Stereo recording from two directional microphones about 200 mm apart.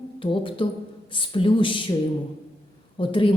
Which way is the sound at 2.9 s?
25° left (ahead or behind).